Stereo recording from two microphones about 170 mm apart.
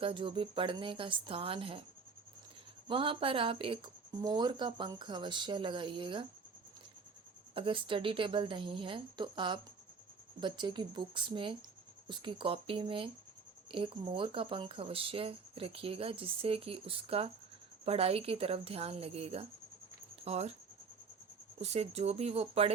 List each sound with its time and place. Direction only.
0.0 s speech: 30° right (ahead or behind)
2.8 s speech: 30° right (ahead or behind)
7.5 s speech: 30° right (ahead or behind)
21.6 s speech: 40° right (ahead or behind)